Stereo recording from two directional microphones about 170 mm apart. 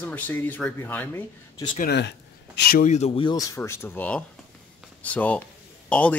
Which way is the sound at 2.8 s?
40° left (ahead or behind).